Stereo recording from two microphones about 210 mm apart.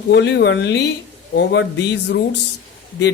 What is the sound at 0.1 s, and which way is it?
Speech, 55° left (ahead or behind).